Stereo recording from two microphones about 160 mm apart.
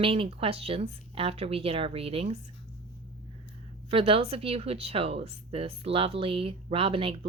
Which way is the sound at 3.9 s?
35° right (ahead or behind).